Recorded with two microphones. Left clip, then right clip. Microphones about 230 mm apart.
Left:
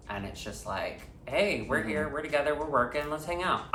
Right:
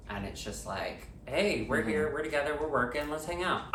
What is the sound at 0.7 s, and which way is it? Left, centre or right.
Speech, centre.